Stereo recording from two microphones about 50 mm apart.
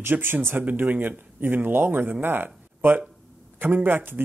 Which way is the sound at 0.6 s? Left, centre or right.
Right.